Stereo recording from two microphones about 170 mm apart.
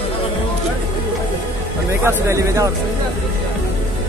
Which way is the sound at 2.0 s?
15° right (ahead or behind).